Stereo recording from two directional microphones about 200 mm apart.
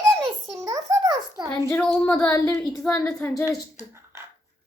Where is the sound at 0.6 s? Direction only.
15° right (ahead or behind).